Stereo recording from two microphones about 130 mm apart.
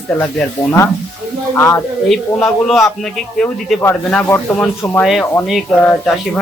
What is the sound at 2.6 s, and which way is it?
Speech, 5° left (ahead or behind).